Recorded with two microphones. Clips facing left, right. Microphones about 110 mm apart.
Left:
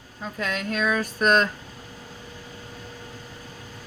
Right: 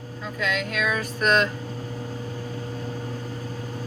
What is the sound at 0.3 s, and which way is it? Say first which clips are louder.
Speech: right 1 dB; 35° left (ahead or behind).